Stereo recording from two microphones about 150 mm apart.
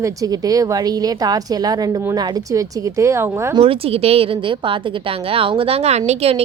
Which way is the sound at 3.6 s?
40° right (ahead or behind).